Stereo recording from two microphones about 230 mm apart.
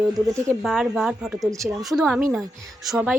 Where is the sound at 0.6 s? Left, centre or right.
Centre.